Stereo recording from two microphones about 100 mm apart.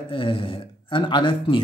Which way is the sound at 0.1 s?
65° left (ahead or behind).